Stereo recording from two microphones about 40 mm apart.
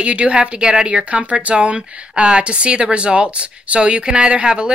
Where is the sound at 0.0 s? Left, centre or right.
Right.